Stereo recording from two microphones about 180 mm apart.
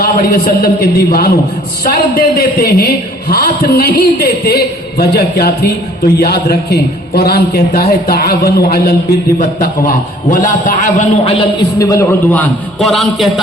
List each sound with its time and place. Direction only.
0.0 s a man's voice: 55° left (ahead or behind)
11.2 s a man's voice: 30° left (ahead or behind)
11.8 s a man's voice: 15° left (ahead or behind); by 13.4 s centre (ahead or behind)